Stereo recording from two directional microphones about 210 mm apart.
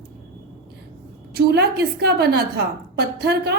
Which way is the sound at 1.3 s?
50° right (ahead or behind).